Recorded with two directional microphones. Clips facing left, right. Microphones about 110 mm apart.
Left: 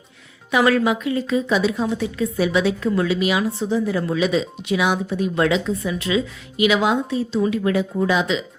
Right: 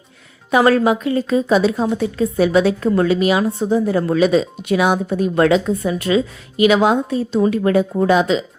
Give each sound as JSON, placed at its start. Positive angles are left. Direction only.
{"t": 0.5, "sound": "a woman's voice", "side_deg": -35}